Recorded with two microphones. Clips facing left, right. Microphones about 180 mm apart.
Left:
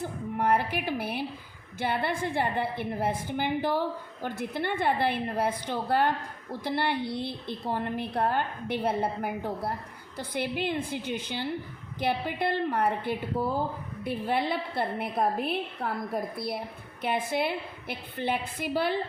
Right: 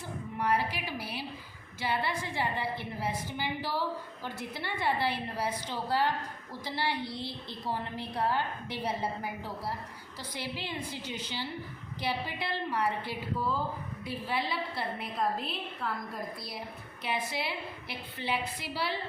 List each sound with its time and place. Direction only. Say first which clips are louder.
0.3 s a woman's voice: left 4 dB; 50° left (ahead or behind)